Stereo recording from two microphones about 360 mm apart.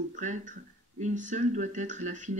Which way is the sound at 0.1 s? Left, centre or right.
Right.